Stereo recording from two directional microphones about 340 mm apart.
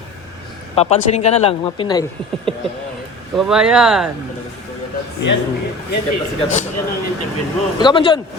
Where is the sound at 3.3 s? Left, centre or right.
Centre.